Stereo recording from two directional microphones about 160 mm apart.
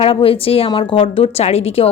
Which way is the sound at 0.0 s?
35° left (ahead or behind).